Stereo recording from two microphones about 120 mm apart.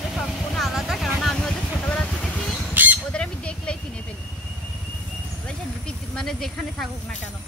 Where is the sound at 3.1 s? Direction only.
10° left (ahead or behind).